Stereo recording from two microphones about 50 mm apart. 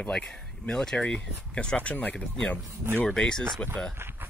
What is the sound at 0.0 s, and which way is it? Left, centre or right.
Speech, centre.